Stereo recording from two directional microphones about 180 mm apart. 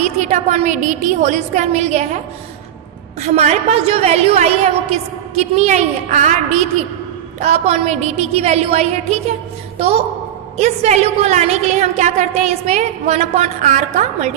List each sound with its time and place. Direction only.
0.0 s a woman's voice: 40° right (ahead or behind)
3.2 s a woman's voice: 40° right (ahead or behind)